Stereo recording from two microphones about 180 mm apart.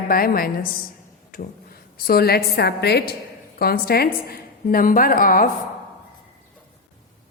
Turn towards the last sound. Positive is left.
turn(degrees=50)  # may be behind; listen again after turning